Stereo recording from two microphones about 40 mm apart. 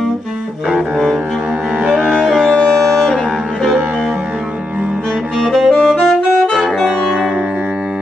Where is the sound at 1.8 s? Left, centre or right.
Right.